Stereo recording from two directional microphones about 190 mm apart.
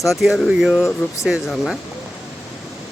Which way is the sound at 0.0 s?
Centre (ahead or behind).